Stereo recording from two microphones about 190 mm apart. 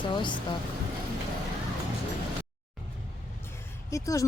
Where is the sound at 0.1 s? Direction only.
25° left (ahead or behind).